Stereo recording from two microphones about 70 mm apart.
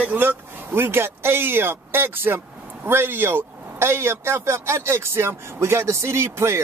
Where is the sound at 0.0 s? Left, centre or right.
Right.